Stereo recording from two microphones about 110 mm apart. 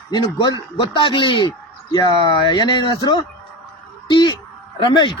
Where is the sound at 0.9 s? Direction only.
50° left (ahead or behind).